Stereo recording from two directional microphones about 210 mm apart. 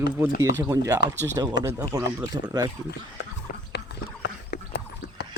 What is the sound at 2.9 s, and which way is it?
Horse, 50° left (ahead or behind).